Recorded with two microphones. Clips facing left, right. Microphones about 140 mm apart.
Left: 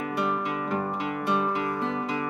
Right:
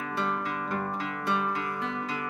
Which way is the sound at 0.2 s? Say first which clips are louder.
Left 2 dB; 15° left (ahead or behind).